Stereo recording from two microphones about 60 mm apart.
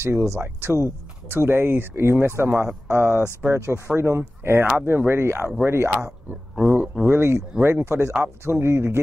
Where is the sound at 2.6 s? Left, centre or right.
Right.